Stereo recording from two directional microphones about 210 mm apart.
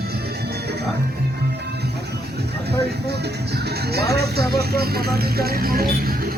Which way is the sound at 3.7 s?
50° right (ahead or behind).